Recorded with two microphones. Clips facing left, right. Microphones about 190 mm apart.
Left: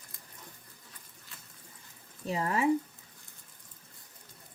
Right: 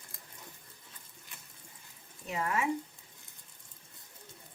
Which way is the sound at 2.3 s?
30° left (ahead or behind).